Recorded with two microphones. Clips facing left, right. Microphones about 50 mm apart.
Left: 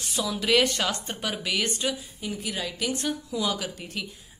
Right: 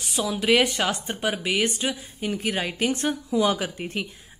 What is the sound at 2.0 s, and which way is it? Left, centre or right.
A woman's voice, right.